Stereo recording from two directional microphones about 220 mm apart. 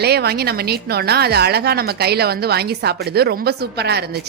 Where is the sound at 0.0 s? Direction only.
45° right (ahead or behind).